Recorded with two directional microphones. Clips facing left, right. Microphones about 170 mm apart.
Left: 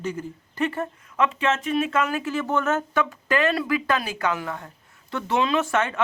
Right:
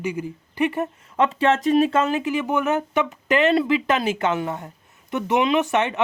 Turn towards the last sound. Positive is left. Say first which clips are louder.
# right 3 dB
turn(degrees=-20)  # may be behind; listen again after turning